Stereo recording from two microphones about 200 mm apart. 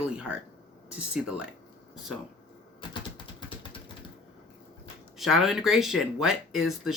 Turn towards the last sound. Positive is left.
turn(degrees=0)  # may be behind; listen again after turning